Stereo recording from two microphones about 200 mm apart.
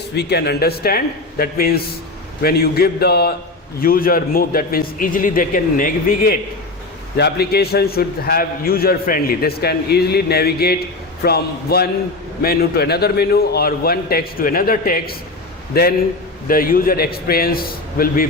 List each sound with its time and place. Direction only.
0.2 s a man's voice: 55° left (ahead or behind)
7.2 s a man's voice: 55° left (ahead or behind)